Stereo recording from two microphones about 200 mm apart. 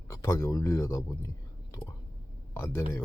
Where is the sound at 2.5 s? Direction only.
10° left (ahead or behind).